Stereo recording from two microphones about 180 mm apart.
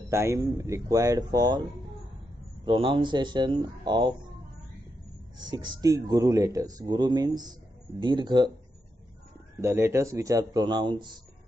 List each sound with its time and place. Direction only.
0.1 s speech: 15° right (ahead or behind)
2.6 s speech: 30° right (ahead or behind)
5.4 s speech: 25° right (ahead or behind)
9.6 s speech: 15° right (ahead or behind)